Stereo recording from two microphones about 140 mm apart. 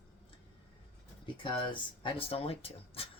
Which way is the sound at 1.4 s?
35° left (ahead or behind).